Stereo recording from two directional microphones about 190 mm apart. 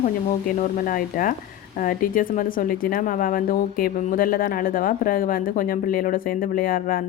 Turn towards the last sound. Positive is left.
turn(degrees=50)  # may be behind; listen again after turning